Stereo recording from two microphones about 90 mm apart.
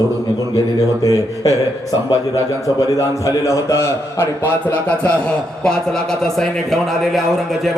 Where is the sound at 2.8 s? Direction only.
35° left (ahead or behind); by 5.1 s 20° left (ahead or behind).